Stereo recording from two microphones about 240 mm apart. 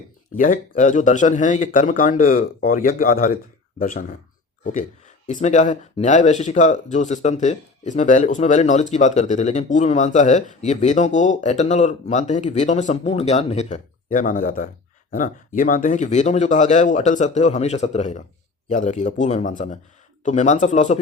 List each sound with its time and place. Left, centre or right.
0.3 s speech: left